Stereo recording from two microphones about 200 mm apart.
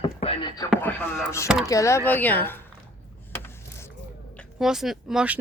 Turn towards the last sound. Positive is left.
turn(degrees=-5)  # may be behind; listen again after turning